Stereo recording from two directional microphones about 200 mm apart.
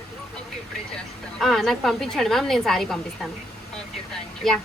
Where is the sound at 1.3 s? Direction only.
Centre (ahead or behind).